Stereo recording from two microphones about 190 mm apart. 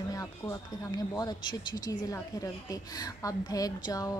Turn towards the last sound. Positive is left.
turn(degrees=20)  # may be behind; listen again after turning